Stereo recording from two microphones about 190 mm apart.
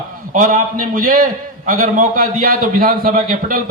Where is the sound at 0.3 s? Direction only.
45° right (ahead or behind).